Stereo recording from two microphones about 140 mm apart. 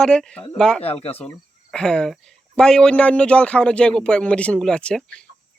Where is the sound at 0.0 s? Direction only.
5° left (ahead or behind).